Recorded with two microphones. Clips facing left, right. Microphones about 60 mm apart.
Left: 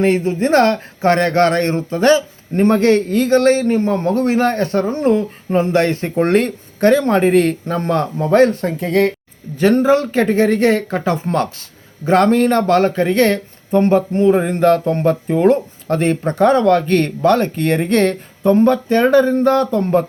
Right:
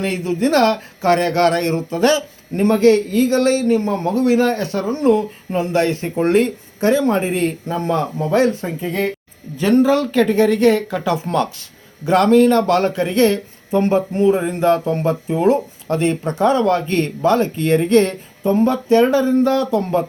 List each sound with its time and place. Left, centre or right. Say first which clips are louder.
0.0 s speech: left 4 dB; left
8.6 s speech: left 5 dB; left
9.6 s speech: left 1 dB; left
9.8 s speech: left 1 dB; left